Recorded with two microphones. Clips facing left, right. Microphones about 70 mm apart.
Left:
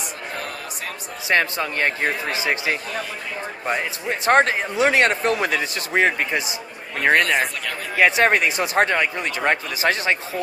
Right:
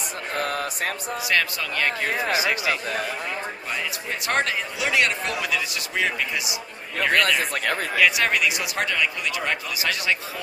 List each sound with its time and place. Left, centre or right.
1.3 s a man's voice: left